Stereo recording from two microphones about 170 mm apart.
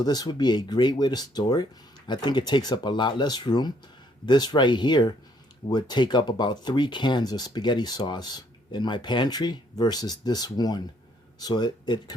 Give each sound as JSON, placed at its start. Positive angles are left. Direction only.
{"t": 0.0, "sound": "speech", "side_deg": 25}